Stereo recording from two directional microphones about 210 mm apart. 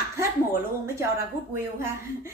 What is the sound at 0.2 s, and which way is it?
A woman's voice, 15° right (ahead or behind).